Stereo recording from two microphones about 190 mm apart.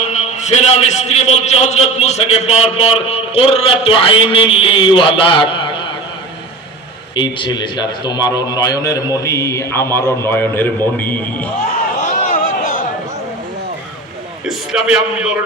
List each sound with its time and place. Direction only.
0.1 s a man's voice: 35° left (ahead or behind)
7.2 s a man's voice: 25° left (ahead or behind); by 11.4 s 10° left (ahead or behind)
12.1 s a sound: 40° left (ahead or behind)
14.4 s a man's voice: 5° right (ahead or behind)